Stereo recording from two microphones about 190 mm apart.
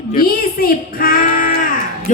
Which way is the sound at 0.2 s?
50° left (ahead or behind).